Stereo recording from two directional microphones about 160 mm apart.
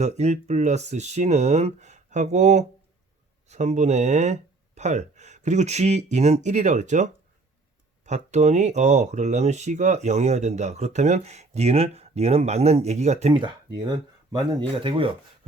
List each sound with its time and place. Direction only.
0.0 s speech: 45° right (ahead or behind)
13.4 s speech: 25° right (ahead or behind)